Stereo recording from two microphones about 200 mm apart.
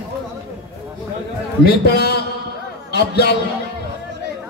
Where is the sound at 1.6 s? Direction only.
50° left (ahead or behind).